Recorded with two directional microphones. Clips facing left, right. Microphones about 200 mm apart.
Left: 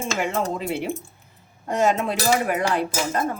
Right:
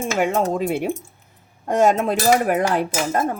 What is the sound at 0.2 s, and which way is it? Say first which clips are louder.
Speech: right 7 dB; 50° right (ahead or behind).